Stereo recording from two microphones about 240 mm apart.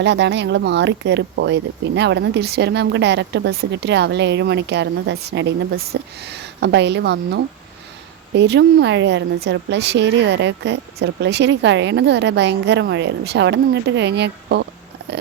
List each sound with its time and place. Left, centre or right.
0.0 s speech: right